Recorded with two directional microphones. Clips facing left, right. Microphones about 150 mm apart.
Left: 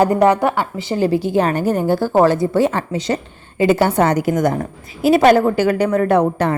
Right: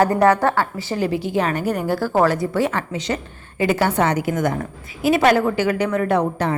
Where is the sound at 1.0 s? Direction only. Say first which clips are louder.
Left 5 dB; 35° left (ahead or behind).